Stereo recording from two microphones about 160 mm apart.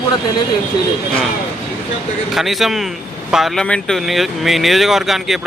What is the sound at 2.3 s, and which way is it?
Speech, centre (ahead or behind).